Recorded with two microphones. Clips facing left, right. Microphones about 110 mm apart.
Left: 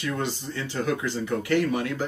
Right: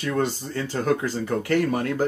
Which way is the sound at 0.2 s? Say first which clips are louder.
Right 5 dB; 45° right (ahead or behind).